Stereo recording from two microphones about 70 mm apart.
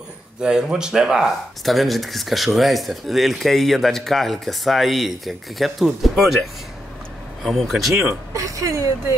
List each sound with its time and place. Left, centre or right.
0.4 s speech: centre
8.3 s speech: right